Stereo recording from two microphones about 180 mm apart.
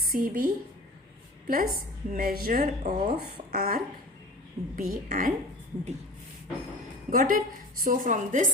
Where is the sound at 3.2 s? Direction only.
60° right (ahead or behind).